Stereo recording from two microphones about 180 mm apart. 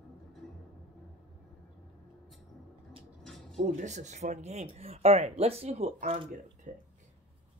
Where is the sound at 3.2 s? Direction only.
5° left (ahead or behind).